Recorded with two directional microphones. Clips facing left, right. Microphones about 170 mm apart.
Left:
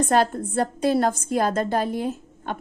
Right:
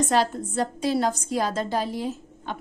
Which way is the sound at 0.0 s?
55° left (ahead or behind).